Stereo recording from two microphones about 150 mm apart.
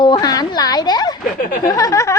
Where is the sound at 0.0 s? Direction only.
30° left (ahead or behind).